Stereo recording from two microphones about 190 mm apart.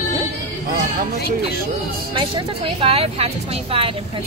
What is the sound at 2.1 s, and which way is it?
Speech, 30° right (ahead or behind).